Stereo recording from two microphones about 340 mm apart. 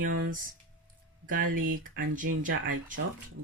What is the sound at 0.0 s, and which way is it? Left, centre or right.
Speech, right.